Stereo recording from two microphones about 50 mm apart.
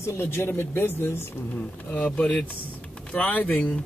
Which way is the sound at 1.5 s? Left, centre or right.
Left.